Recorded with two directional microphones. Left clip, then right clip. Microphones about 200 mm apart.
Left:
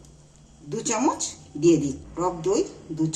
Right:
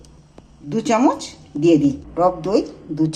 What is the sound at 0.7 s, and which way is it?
Speech, 40° right (ahead or behind).